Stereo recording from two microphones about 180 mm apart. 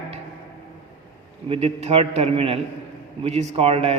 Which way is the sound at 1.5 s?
35° right (ahead or behind).